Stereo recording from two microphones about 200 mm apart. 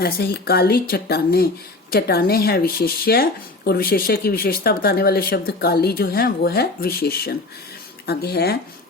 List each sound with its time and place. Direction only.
0.0 s speech: 50° left (ahead or behind)